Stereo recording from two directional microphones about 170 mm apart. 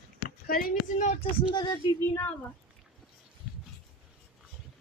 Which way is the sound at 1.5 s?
25° left (ahead or behind).